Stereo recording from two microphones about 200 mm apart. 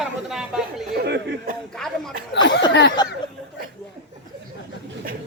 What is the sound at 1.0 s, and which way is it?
Speech, 55° right (ahead or behind).